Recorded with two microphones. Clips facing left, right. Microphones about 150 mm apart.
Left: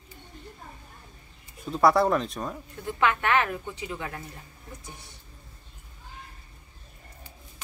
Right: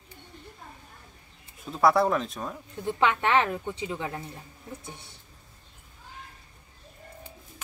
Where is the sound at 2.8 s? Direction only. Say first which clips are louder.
Right 1 dB; 25° right (ahead or behind).